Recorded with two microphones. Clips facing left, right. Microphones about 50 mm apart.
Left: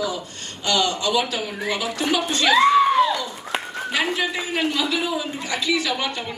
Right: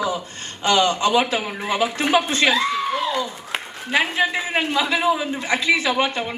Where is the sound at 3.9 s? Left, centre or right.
Right.